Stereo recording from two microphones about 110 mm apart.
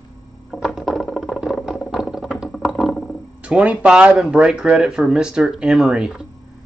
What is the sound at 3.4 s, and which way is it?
Speech, 10° right (ahead or behind).